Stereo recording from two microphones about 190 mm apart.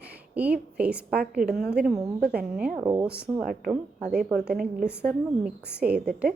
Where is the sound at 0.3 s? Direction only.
5° right (ahead or behind).